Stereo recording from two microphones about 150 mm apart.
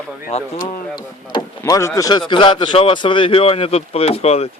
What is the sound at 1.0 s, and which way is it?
Speech, 25° left (ahead or behind).